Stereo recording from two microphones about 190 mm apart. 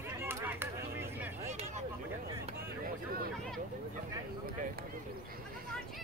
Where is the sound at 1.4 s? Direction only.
35° right (ahead or behind).